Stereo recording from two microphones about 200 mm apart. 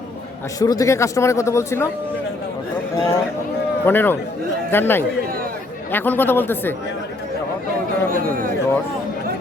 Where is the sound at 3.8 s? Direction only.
10° left (ahead or behind).